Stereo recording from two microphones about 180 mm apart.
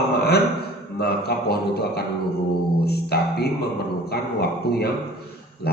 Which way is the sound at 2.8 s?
60° left (ahead or behind).